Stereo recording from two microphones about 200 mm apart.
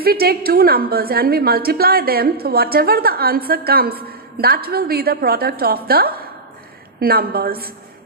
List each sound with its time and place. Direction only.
0.0 s a woman's voice: 50° right (ahead or behind)